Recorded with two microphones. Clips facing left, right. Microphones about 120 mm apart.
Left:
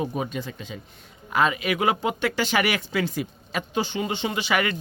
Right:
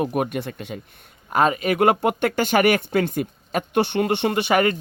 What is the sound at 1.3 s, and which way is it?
Speech, 45° right (ahead or behind).